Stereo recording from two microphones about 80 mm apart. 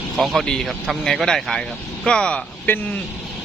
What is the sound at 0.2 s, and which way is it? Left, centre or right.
Speech, centre.